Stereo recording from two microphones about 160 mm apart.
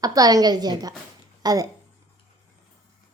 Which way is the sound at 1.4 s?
25° right (ahead or behind).